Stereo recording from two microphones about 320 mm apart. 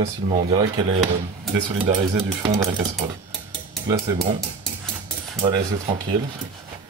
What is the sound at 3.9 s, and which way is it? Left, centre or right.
Dishes, centre.